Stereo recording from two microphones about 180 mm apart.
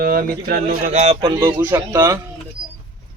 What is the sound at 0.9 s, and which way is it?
Speech, 35° right (ahead or behind).